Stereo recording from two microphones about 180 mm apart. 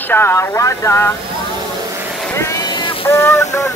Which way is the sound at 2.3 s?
15° left (ahead or behind).